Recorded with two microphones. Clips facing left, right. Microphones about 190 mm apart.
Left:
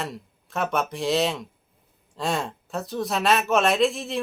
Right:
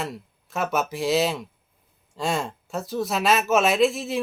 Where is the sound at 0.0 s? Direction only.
Centre (ahead or behind).